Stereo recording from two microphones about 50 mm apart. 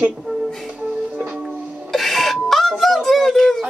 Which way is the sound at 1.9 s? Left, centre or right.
Centre.